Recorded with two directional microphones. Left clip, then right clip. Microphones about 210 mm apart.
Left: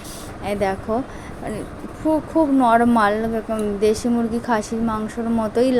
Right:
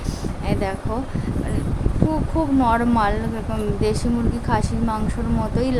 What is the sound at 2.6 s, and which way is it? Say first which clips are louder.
A woman's voice: left 3 dB; 10° left (ahead or behind).